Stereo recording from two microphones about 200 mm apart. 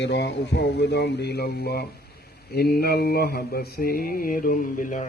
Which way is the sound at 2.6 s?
50° left (ahead or behind).